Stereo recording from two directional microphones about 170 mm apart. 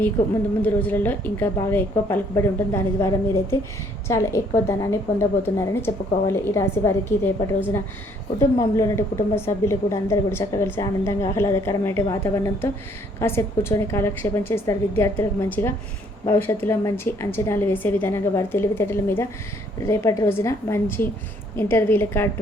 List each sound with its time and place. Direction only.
0.6 s a woman's voice: 10° left (ahead or behind)